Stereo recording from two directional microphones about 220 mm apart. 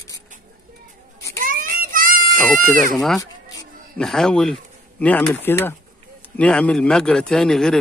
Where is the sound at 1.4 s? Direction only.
40° right (ahead or behind).